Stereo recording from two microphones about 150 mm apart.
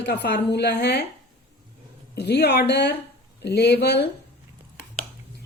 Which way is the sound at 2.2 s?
90° left.